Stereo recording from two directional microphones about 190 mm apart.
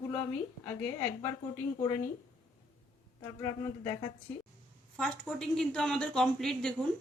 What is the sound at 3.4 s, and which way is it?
Speech, 15° left (ahead or behind).